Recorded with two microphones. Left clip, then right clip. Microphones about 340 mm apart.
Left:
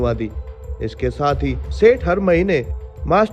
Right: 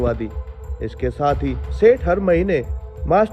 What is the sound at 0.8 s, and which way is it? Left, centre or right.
Speech, centre.